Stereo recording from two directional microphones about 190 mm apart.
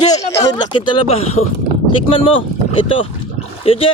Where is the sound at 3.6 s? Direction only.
30° left (ahead or behind).